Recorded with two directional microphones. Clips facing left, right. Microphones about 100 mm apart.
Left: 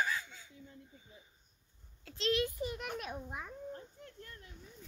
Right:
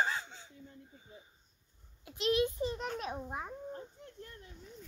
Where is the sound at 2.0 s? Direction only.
20° right (ahead or behind).